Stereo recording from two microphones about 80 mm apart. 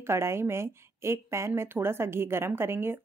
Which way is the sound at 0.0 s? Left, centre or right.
Right.